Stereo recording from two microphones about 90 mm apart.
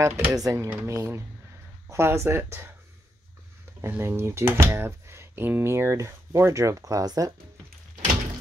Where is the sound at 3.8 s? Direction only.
25° right (ahead or behind); by 7.3 s 40° right (ahead or behind).